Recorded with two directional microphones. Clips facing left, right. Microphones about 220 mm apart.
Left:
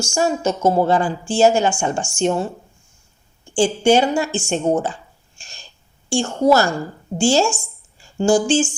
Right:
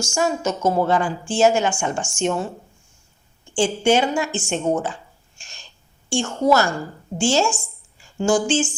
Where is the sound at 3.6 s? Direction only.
35° left (ahead or behind).